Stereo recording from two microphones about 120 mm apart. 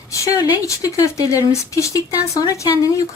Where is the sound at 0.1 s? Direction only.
30° left (ahead or behind).